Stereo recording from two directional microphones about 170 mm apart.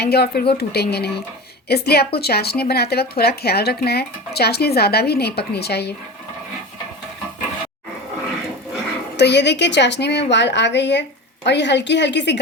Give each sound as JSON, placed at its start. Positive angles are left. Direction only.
{"t": 0.0, "sound": "a woman's voice", "side_deg": 70}
{"t": 9.1, "sound": "a woman's voice", "side_deg": 85}